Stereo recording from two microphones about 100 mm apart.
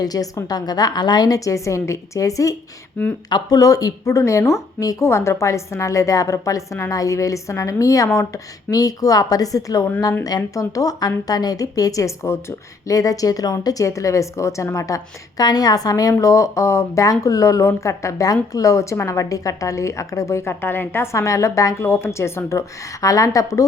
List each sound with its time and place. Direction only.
0.0 s a woman's voice: 35° left (ahead or behind)